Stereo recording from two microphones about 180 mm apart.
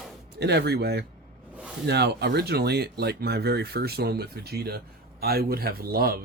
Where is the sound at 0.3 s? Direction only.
70° right (ahead or behind).